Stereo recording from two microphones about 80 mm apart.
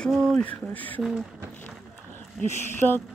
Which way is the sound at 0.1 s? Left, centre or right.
Centre.